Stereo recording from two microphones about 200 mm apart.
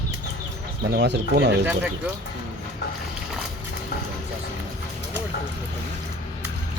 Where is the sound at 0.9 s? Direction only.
60° right (ahead or behind).